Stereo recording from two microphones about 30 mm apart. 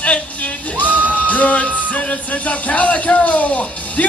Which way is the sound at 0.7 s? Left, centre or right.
Left.